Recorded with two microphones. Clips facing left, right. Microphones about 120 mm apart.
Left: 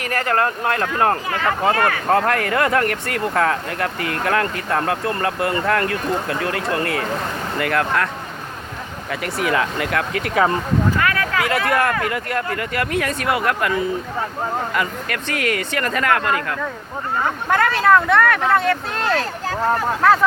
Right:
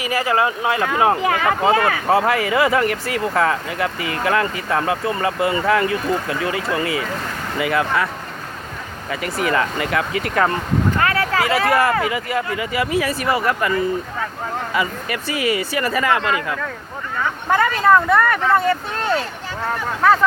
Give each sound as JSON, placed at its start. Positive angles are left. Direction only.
{"t": 0.0, "sound": "speech", "side_deg": -5}
{"t": 1.2, "sound": "speech", "side_deg": -90}
{"t": 1.5, "sound": "speech", "side_deg": -5}
{"t": 9.0, "sound": "speech", "side_deg": 0}
{"t": 10.9, "sound": "a sound", "side_deg": -30}
{"t": 11.4, "sound": "speech", "side_deg": 0}
{"t": 19.5, "sound": "speech", "side_deg": 40}